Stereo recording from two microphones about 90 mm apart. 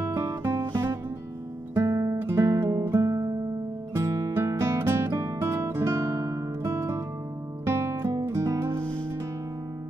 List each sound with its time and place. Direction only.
1.8 s guitar: 35° right (ahead or behind)
2.1 s music: 30° right (ahead or behind)
6.2 s guitar: 40° right (ahead or behind)
6.7 s music: 30° right (ahead or behind)